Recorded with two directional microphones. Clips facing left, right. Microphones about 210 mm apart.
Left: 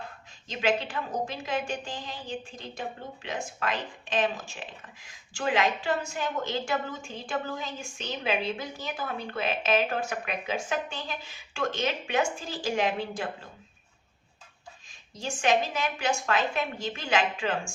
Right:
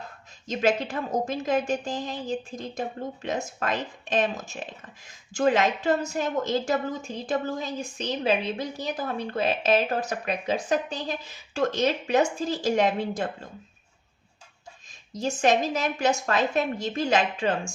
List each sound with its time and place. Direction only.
0.4 s a woman's voice: 45° right (ahead or behind)
15.1 s a woman's voice: 40° right (ahead or behind)